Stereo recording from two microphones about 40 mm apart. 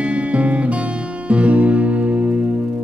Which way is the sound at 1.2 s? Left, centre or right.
Right.